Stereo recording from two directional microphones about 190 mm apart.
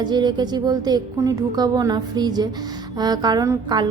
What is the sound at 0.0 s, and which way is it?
A woman's voice, 25° right (ahead or behind).